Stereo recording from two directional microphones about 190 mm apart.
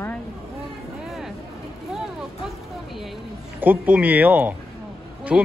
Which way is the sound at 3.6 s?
10° right (ahead or behind).